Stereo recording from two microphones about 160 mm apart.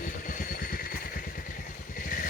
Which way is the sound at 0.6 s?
65° left (ahead or behind).